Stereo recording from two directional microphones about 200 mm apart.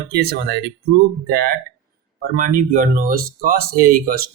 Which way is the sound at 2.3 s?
45° right (ahead or behind).